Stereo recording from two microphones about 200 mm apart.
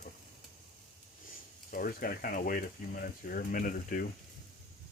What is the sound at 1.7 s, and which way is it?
Speech, 45° left (ahead or behind).